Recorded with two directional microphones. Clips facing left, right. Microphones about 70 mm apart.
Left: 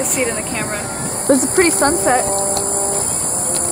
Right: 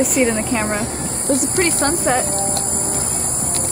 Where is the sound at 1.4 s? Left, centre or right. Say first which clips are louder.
Left 4 dB; left.